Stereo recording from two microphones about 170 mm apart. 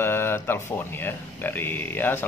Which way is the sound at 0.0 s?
15° left (ahead or behind).